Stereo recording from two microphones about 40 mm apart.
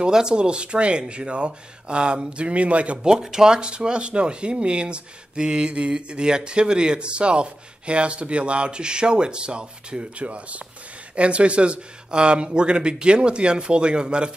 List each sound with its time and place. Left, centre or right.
0.0 s speech: centre
3.0 s speech: centre